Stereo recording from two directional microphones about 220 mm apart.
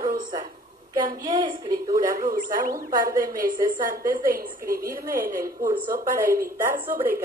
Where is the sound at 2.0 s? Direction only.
40° right (ahead or behind).